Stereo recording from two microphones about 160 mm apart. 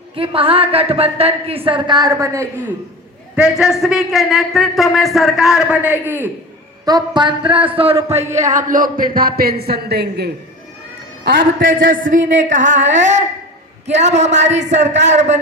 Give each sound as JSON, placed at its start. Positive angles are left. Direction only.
{"t": 0.2, "sound": "speech", "side_deg": -35}
{"t": 3.3, "sound": "a man's voice", "side_deg": -5}
{"t": 6.8, "sound": "speech", "side_deg": -25}
{"t": 8.4, "sound": "speech", "side_deg": -50}
{"t": 11.6, "sound": "speech", "side_deg": -60}